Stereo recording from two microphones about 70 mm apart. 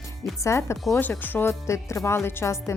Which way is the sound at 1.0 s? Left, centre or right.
Left.